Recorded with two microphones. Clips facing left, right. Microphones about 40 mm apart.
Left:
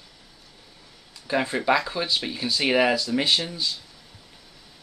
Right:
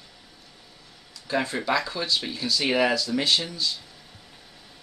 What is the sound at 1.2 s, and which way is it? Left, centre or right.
Speech, centre.